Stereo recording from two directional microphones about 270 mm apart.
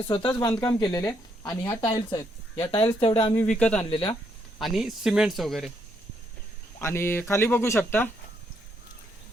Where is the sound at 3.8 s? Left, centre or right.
Centre.